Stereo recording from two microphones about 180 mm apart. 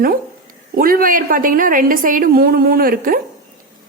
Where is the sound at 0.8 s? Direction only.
55° right (ahead or behind).